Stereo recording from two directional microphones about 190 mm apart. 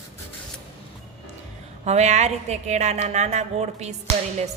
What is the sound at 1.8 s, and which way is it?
A woman's voice, 35° right (ahead or behind).